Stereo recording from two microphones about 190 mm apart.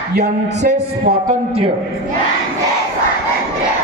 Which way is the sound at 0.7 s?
50° right (ahead or behind).